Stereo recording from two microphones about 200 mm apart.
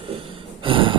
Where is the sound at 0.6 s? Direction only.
25° right (ahead or behind).